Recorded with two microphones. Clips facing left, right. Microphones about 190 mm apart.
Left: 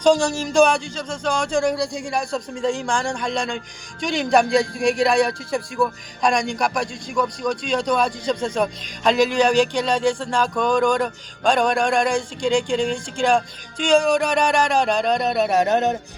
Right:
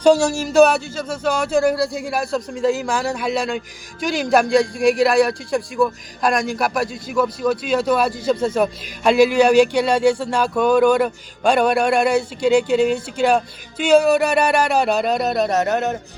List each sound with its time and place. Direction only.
0.0 s speech: 10° right (ahead or behind)
15.5 s music: 20° left (ahead or behind)